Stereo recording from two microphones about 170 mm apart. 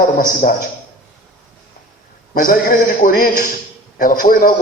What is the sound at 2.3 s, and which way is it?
A man's voice, 55° left (ahead or behind).